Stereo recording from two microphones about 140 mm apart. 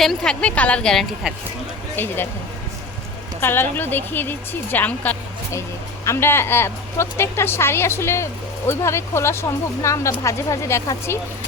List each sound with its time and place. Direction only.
0.0 s a woman's voice: 5° left (ahead or behind)
1.2 s a woman's voice: 5° right (ahead or behind)
2.0 s a woman's voice: 15° left (ahead or behind)
3.4 s a woman's voice: 15° left (ahead or behind)